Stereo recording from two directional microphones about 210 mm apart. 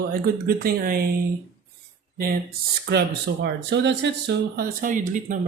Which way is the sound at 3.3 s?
55° right (ahead or behind).